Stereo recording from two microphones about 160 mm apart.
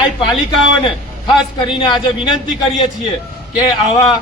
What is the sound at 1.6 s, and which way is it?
Speech, 30° left (ahead or behind).